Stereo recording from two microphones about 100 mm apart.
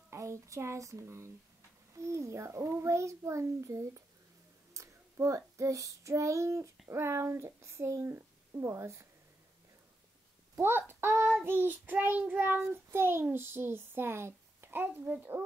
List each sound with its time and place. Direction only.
0.1 s child singing: 30° right (ahead or behind)
10.5 s speech: 20° right (ahead or behind)
11.4 s child singing: 20° right (ahead or behind)